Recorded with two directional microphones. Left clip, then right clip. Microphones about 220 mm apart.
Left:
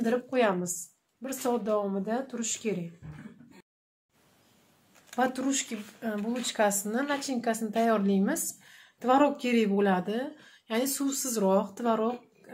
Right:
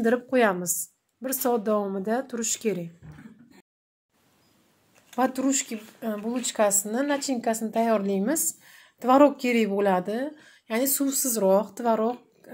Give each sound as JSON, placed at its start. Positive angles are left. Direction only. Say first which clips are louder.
{"t": 0.0, "sound": "speech", "louder": "right 4 dB", "side_deg": -35}
{"t": 5.1, "sound": "speech", "louder": "right 3 dB", "side_deg": -20}